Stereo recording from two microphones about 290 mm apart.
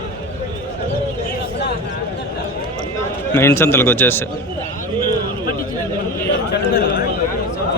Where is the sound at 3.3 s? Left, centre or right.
Centre.